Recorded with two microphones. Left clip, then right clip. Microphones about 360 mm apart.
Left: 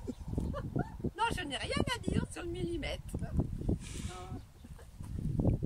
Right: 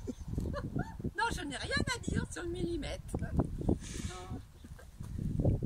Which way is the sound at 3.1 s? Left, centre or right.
Right.